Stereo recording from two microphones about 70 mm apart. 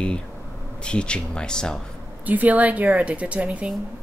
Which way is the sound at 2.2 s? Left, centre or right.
Right.